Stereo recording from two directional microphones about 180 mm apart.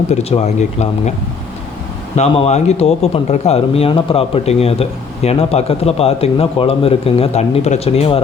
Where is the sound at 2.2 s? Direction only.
35° left (ahead or behind).